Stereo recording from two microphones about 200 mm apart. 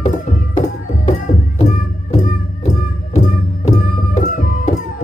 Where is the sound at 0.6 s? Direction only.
35° left (ahead or behind).